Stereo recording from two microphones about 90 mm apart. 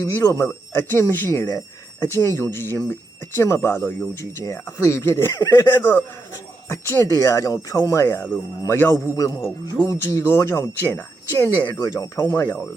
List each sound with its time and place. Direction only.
0.0 s speech: 30° left (ahead or behind)
9.1 s speech: 40° left (ahead or behind)
12.2 s speech: 20° left (ahead or behind)